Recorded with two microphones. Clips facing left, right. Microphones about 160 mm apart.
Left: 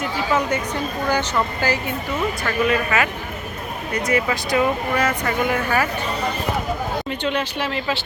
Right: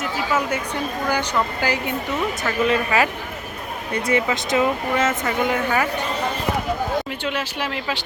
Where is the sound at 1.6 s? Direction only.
15° right (ahead or behind).